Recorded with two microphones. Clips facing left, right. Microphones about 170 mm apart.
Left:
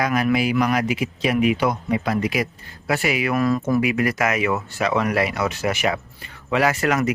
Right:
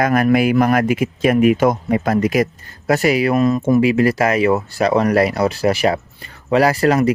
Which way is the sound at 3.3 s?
25° right (ahead or behind).